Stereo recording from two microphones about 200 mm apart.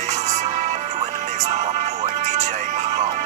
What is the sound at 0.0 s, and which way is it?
Music, 35° right (ahead or behind).